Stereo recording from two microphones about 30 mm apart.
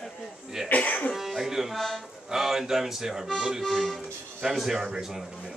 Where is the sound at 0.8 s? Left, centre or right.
Left.